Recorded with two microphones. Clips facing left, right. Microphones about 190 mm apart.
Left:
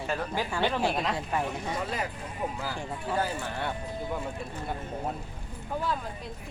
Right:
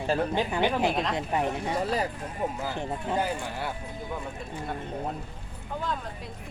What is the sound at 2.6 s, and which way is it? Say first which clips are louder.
Speech: right 3 dB; 20° right (ahead or behind).